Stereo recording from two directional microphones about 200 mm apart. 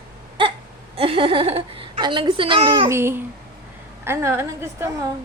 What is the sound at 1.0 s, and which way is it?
A woman's voice, 25° right (ahead or behind).